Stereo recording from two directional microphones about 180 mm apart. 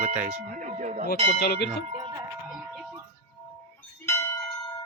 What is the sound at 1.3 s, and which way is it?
Bell, 65° left (ahead or behind).